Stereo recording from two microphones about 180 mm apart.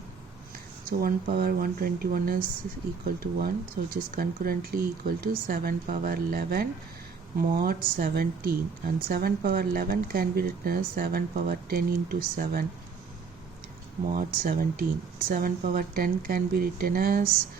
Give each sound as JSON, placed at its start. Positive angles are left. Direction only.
{"t": 0.9, "sound": "speech", "side_deg": -55}
{"t": 3.9, "sound": "speech", "side_deg": -55}
{"t": 14.1, "sound": "speech", "side_deg": -55}